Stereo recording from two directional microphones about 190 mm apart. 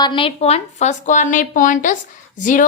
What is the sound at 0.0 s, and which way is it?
A woman's voice, 25° left (ahead or behind).